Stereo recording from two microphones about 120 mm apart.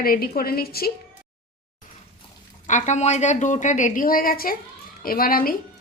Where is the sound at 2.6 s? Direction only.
85° left.